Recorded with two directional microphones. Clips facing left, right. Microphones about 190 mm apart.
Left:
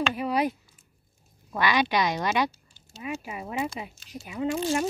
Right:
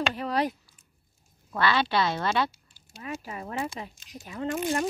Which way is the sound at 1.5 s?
15° left (ahead or behind).